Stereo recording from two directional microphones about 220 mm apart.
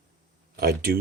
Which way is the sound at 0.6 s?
45° right (ahead or behind).